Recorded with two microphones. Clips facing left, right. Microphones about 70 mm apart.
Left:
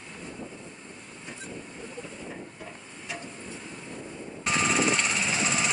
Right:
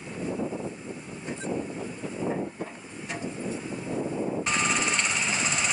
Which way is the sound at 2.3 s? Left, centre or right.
Right.